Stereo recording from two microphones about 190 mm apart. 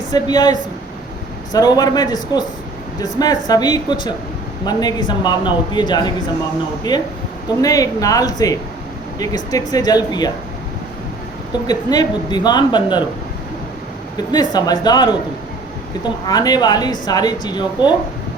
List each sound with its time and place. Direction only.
0.1 s a man's voice: 20° left (ahead or behind)
11.6 s a man's voice: 20° left (ahead or behind)
14.5 s a man's voice: 20° left (ahead or behind)